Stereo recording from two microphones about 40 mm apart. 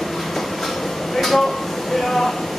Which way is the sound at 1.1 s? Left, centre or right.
Centre.